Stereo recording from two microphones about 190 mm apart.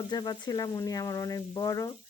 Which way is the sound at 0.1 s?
20° left (ahead or behind).